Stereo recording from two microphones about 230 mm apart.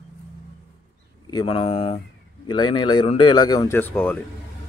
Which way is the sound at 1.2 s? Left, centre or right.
Left.